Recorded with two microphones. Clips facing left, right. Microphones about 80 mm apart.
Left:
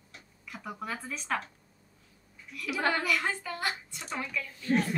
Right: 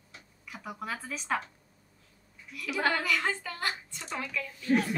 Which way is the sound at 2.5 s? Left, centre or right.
Centre.